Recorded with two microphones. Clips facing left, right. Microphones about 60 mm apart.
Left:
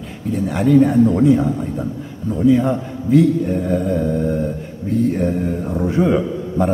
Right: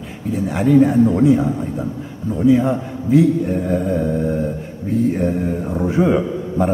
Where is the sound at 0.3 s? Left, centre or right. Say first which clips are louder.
Even; centre.